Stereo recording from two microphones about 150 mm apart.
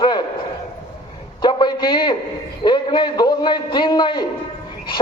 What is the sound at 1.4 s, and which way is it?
A man's voice, 30° left (ahead or behind).